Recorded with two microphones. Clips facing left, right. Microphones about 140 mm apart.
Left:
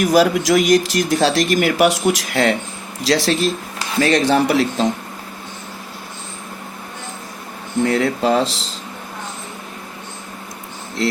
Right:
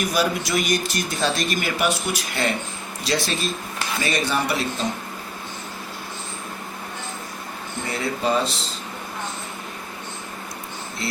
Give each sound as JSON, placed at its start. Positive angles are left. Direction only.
{"t": 0.0, "sound": "speech", "side_deg": 90}
{"t": 7.9, "sound": "speech", "side_deg": 90}
{"t": 11.0, "sound": "insect", "side_deg": 90}